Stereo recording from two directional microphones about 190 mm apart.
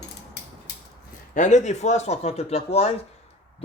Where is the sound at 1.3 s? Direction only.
40° left (ahead or behind).